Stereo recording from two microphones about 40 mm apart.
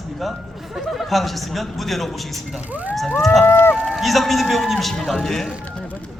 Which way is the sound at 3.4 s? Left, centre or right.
Left.